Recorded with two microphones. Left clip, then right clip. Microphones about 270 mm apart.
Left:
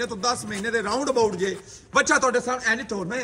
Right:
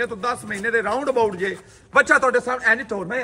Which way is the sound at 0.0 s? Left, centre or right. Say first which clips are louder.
Right 2 dB; centre.